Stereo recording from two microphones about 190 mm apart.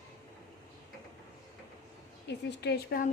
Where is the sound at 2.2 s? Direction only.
65° left (ahead or behind).